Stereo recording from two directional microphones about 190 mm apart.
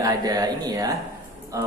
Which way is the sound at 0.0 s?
20° right (ahead or behind).